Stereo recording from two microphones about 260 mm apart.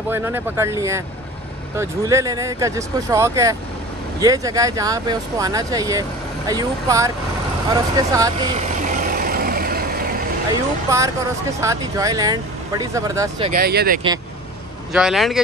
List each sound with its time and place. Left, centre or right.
0.1 s speech: centre
8.8 s vehicle: right
10.5 s speech: centre
13.5 s speech: right
14.9 s speech: centre